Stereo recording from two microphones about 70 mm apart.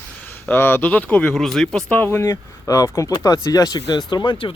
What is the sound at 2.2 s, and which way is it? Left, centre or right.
Speech, left.